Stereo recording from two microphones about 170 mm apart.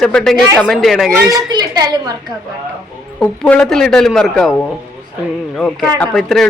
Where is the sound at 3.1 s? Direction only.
5° left (ahead or behind).